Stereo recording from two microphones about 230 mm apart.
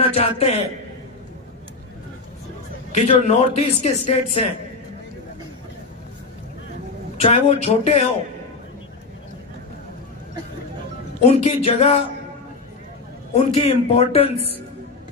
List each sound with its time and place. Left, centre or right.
0.0 s speech: left
2.9 s speech: left
7.2 s speech: left
11.2 s speech: left
13.3 s speech: left